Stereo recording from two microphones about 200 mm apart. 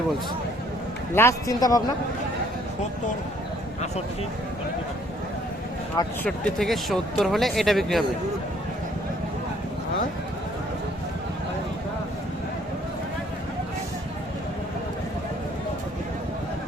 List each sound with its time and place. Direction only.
1.1 s a man's voice: 15° left (ahead or behind)
6.2 s speech: 5° left (ahead or behind)